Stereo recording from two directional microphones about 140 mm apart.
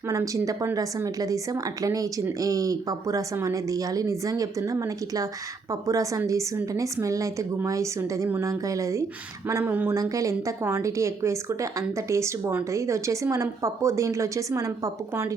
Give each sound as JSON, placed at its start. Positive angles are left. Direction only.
{"t": 0.1, "sound": "a woman's voice", "side_deg": -20}